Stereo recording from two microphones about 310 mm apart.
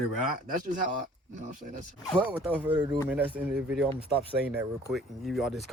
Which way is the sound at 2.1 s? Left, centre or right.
Centre.